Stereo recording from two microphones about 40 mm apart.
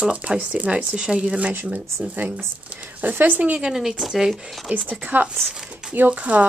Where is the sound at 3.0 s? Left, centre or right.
Right.